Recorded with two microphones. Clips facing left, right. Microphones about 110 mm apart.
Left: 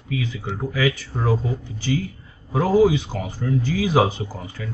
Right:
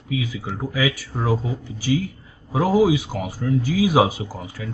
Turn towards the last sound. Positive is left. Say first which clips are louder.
# even
turn(degrees=-10)  # may be behind; listen again after turning